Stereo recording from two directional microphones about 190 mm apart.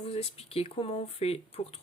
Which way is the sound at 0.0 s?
30° left (ahead or behind).